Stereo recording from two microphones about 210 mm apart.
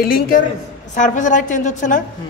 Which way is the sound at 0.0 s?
45° left (ahead or behind).